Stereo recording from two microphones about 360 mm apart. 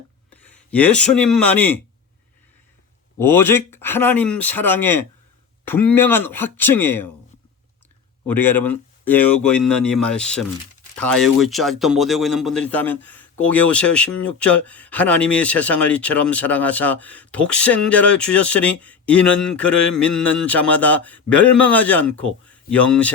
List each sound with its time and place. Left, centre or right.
0.4 s speech: centre
3.2 s speech: centre
8.3 s speech: centre